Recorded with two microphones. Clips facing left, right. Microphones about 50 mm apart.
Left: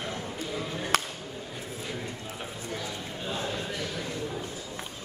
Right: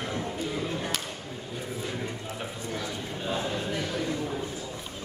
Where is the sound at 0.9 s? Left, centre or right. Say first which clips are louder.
Left 7 dB; left.